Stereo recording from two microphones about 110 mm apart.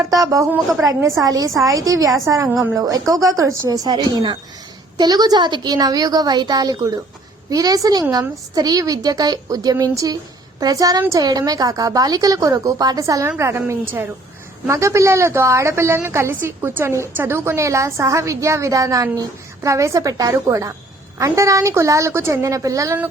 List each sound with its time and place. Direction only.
0.1 s a woman's voice: 30° right (ahead or behind)